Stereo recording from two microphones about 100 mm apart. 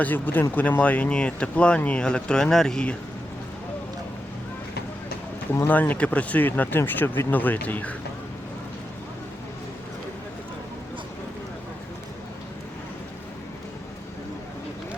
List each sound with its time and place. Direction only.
0.0 s speech: 20° left (ahead or behind)
5.5 s speech: 20° left (ahead or behind)